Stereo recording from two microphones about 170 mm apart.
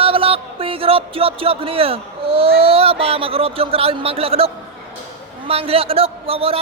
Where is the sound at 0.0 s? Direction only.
35° right (ahead or behind).